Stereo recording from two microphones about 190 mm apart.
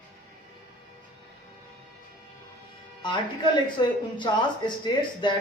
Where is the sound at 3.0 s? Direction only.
25° left (ahead or behind).